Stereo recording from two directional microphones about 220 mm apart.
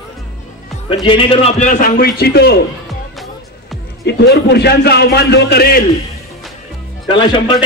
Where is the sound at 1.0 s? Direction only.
25° left (ahead or behind); by 2.5 s 45° left (ahead or behind).